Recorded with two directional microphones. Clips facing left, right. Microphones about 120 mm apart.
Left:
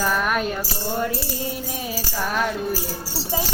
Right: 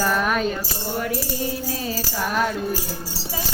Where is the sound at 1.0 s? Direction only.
25° left (ahead or behind).